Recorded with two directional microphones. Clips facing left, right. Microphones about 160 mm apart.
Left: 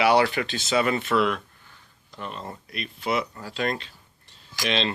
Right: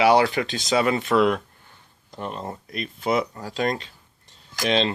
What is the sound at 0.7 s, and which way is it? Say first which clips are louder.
Speech: right 2 dB; 35° right (ahead or behind).